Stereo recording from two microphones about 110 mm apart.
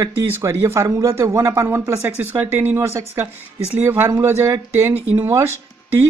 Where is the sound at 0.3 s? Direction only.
25° right (ahead or behind).